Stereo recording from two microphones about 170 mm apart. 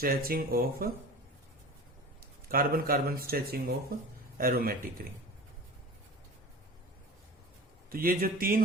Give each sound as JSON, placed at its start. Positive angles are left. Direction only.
{"t": 0.0, "sound": "speech", "side_deg": -60}
{"t": 2.5, "sound": "speech", "side_deg": -60}
{"t": 7.9, "sound": "speech", "side_deg": -60}